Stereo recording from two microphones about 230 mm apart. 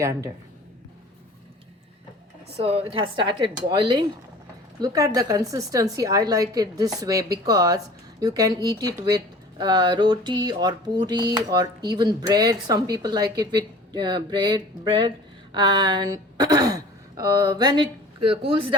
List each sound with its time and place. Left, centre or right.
0.0 s speech: centre
2.6 s a woman's voice: right